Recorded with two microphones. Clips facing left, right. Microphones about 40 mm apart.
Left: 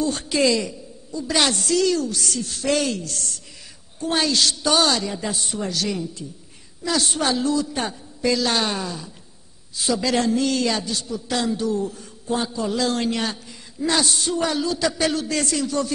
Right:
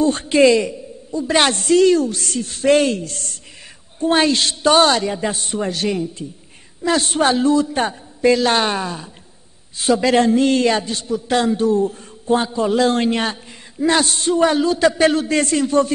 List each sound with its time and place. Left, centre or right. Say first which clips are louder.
0.0 s a woman's voice: right 7 dB; right